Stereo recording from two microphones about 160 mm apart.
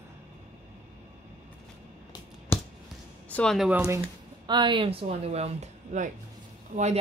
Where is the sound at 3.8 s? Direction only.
20° right (ahead or behind).